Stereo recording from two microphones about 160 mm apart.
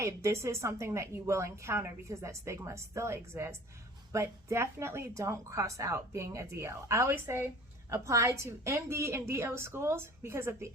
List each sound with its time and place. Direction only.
0.0 s a woman's voice: 20° right (ahead or behind)